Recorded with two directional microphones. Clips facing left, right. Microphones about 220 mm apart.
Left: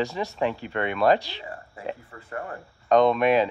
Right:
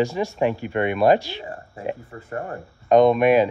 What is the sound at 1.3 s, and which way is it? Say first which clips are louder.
Speech: right 5 dB; 40° right (ahead or behind).